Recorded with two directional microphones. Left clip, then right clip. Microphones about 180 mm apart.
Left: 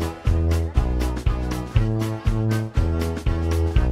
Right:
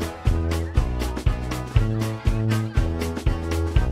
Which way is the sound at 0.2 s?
Centre (ahead or behind).